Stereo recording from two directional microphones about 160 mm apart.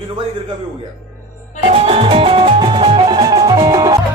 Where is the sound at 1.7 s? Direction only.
40° right (ahead or behind); by 4.0 s 20° right (ahead or behind).